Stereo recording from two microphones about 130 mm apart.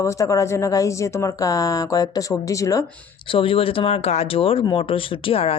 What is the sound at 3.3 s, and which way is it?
Speech, 45° left (ahead or behind).